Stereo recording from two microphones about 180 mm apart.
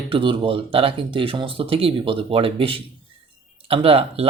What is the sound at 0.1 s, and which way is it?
Speech, 30° right (ahead or behind).